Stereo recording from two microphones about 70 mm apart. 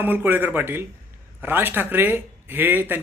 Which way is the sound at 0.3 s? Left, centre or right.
Right.